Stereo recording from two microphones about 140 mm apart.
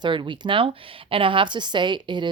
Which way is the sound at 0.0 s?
35° right (ahead or behind).